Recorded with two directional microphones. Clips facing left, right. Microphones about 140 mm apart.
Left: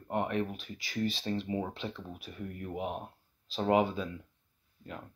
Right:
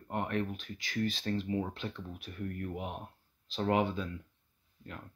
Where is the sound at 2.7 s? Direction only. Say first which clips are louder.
Left 4 dB; 30° left (ahead or behind).